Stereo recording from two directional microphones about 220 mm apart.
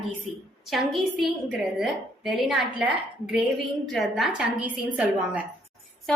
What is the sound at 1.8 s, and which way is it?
A woman's voice, centre (ahead or behind).